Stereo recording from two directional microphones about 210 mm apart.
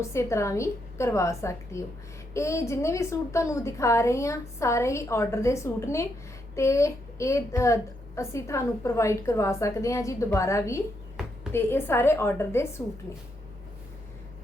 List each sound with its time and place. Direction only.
0.0 s a woman's voice: 15° left (ahead or behind)